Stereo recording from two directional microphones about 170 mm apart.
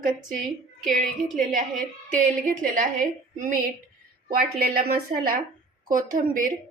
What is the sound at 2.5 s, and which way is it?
Speech, 50° right (ahead or behind).